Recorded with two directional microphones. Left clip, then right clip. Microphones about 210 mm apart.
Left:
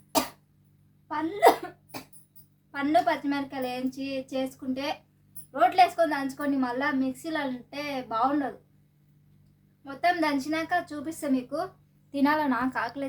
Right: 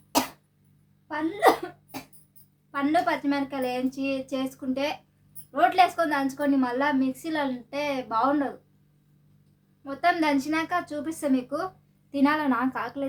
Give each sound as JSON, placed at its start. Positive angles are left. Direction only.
{"t": 0.1, "sound": "cough", "side_deg": -20}
{"t": 1.0, "sound": "speech", "side_deg": -15}
{"t": 2.7, "sound": "a woman's voice", "side_deg": -15}
{"t": 9.8, "sound": "a woman's voice", "side_deg": -10}